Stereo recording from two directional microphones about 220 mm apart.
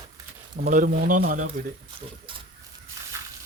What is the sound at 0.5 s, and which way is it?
Speech, 40° right (ahead or behind).